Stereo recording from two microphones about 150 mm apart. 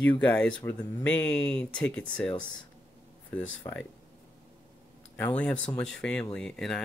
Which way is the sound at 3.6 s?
20° left (ahead or behind).